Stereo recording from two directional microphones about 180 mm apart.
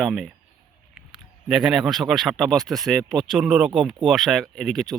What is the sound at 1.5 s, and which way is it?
Speech, 5° right (ahead or behind).